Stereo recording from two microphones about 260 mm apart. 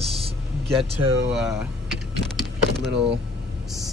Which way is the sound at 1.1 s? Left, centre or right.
Right.